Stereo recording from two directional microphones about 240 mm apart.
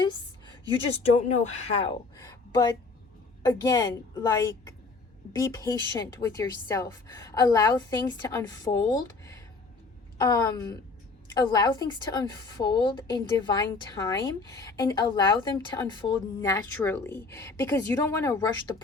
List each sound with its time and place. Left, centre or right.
1.3 s a woman's voice: left